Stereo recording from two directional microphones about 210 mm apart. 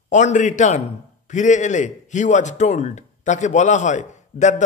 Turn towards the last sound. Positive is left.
turn(degrees=35)  # may be behind; listen again after turning